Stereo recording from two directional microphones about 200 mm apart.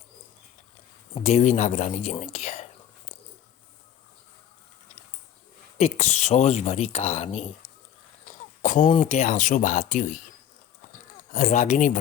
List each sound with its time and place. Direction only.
1.1 s speech: 35° left (ahead or behind)
5.7 s speech: 35° left (ahead or behind)
8.6 s a sound: 40° left (ahead or behind)
9.0 s speech: 35° left (ahead or behind)
11.3 s speech: 40° left (ahead or behind)